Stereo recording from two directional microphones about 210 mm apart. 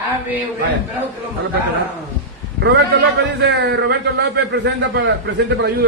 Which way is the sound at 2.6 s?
55° right (ahead or behind).